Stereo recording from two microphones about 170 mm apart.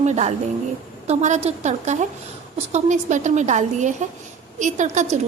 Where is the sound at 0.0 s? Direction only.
45° right (ahead or behind).